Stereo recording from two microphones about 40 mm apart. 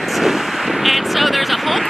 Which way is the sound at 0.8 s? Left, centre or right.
Centre.